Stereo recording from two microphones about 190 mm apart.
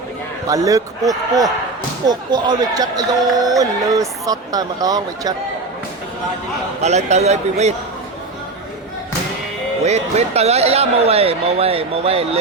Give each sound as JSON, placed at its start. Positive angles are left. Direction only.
{"t": 0.4, "sound": "speech", "side_deg": -20}
{"t": 6.8, "sound": "speech", "side_deg": -35}
{"t": 9.8, "sound": "speech", "side_deg": -35}